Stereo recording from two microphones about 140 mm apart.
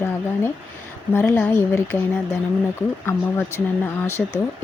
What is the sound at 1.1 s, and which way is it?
Speech, 15° left (ahead or behind).